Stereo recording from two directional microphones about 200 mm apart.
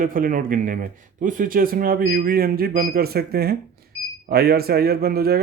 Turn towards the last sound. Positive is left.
turn(degrees=-50)  # may be behind; listen again after turning